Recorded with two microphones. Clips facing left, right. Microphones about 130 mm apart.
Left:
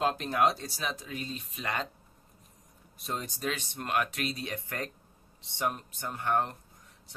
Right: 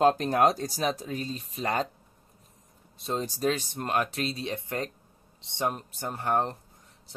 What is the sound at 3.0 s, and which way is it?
Speech, 30° right (ahead or behind).